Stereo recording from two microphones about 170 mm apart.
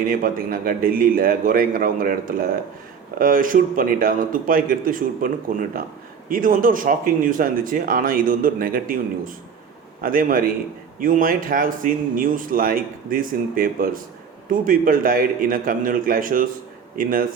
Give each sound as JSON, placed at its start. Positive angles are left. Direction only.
{"t": 0.0, "sound": "speech", "side_deg": -55}